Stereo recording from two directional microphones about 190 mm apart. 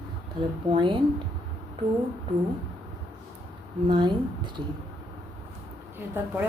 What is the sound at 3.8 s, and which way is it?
Speech, 25° right (ahead or behind).